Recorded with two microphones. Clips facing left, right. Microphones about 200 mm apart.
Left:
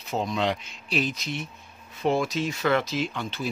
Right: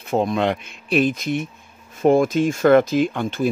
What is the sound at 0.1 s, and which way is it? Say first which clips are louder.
Speech: right 7 dB; 55° right (ahead or behind).